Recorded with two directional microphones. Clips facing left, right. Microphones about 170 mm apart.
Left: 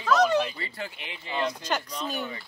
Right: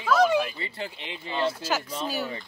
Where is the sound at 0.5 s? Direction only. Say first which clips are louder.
Right 1 dB; 25° right (ahead or behind).